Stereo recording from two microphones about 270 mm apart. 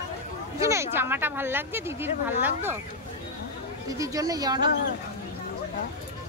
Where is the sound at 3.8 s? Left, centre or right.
Centre.